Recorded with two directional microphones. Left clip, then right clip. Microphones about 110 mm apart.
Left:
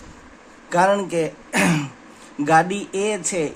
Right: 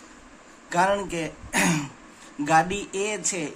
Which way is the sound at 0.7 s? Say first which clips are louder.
Left 5 dB; 50° left (ahead or behind).